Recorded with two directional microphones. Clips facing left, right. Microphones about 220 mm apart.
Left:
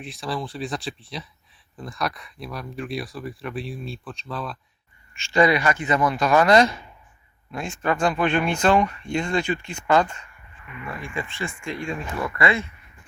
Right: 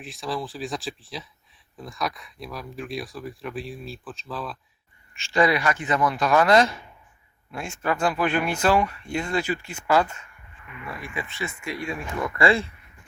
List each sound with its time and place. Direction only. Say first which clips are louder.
0.0 s speech: left 1 dB; centre (ahead or behind)
12.4 s speech: right 3 dB; 30° right (ahead or behind)